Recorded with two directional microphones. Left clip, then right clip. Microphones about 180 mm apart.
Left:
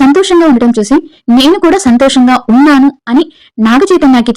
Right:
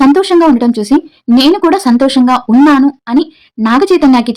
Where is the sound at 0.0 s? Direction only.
20° left (ahead or behind).